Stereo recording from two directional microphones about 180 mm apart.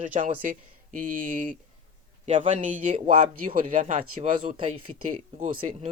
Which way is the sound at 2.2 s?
35° right (ahead or behind).